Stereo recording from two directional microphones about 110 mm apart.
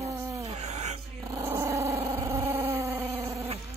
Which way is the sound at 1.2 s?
20° right (ahead or behind).